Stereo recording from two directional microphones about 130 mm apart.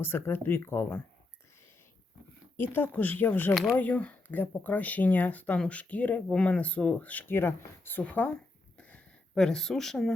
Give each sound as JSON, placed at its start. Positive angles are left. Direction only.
{"t": 0.0, "sound": "speech", "side_deg": 15}
{"t": 2.6, "sound": "speech", "side_deg": 15}
{"t": 3.5, "sound": "speech", "side_deg": 0}
{"t": 3.8, "sound": "speech", "side_deg": 10}
{"t": 8.8, "sound": "a sound", "side_deg": 5}